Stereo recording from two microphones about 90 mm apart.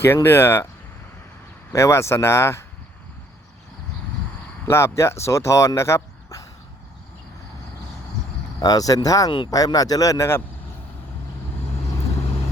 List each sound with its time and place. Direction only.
0.0 s speech: 25° left (ahead or behind)
1.7 s speech: 30° left (ahead or behind)
4.6 s speech: 30° left (ahead or behind)
8.5 s speech: 45° left (ahead or behind)